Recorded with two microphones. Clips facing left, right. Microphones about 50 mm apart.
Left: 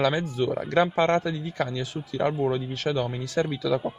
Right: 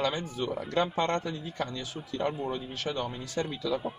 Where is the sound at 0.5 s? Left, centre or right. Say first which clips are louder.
Left 6 dB; left.